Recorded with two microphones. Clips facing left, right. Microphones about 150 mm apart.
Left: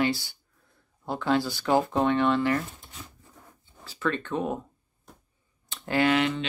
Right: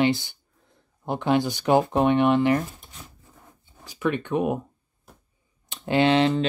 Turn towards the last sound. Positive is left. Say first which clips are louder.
# right 4 dB
turn(degrees=-30)  # may be behind; listen again after turning